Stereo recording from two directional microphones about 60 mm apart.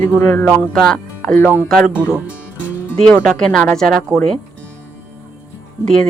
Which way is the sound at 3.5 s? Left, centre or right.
Left.